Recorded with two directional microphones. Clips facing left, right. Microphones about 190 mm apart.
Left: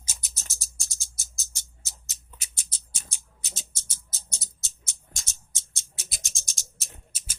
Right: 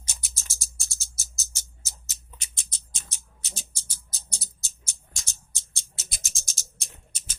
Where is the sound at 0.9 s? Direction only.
5° right (ahead or behind).